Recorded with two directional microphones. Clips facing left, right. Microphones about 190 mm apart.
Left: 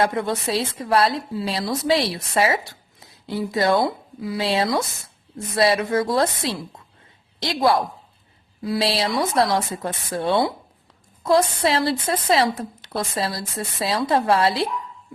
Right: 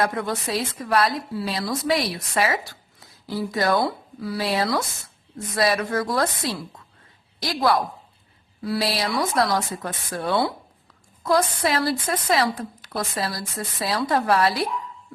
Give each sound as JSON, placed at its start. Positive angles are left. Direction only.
{"t": 0.0, "sound": "a woman's voice", "side_deg": 25}